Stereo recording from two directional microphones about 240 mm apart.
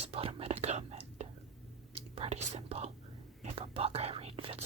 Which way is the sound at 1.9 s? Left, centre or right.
Right.